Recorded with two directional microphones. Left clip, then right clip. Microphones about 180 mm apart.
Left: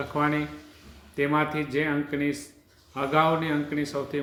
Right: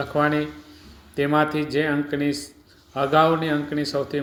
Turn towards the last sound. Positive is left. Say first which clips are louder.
# right 4 dB
turn(degrees=-25)  # may be behind; listen again after turning